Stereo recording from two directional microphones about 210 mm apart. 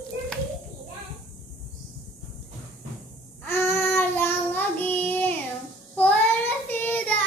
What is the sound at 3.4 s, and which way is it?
Child singing, 10° left (ahead or behind).